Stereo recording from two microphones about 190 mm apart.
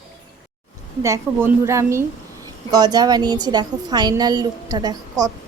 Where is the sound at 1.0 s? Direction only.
15° right (ahead or behind).